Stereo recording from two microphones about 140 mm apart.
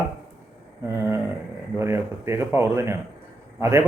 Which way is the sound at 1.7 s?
20° right (ahead or behind).